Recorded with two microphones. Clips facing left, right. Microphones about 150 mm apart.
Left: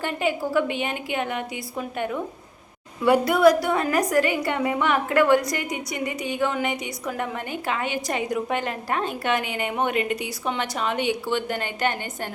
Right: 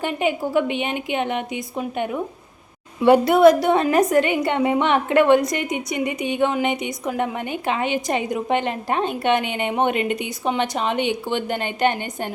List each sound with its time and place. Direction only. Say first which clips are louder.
0.0 s a woman's voice: right 3 dB; 15° right (ahead or behind)